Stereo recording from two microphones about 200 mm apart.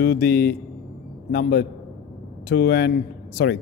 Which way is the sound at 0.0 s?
55° left (ahead or behind).